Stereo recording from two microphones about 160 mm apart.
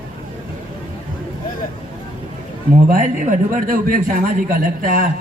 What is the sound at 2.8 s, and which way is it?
A man's voice, 55° right (ahead or behind).